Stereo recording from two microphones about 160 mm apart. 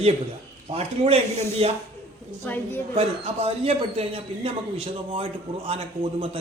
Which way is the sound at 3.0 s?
40° right (ahead or behind).